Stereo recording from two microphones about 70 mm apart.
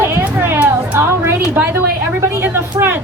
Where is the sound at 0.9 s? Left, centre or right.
Right.